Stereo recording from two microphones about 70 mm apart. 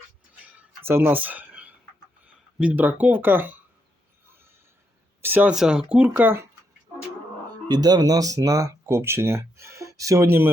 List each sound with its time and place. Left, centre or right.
0.3 s a sound: right
0.8 s a sound: right
2.6 s speech: right
5.2 s speech: right
5.5 s speech: centre
6.1 s speech: right
7.7 s speech: right
10.2 s speech: right